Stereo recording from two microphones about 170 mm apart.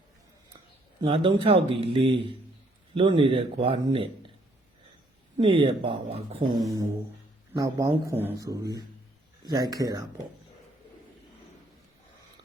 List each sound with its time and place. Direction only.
1.0 s speech: 35° right (ahead or behind)
5.4 s speech: 30° right (ahead or behind)
7.5 s speech: 20° right (ahead or behind)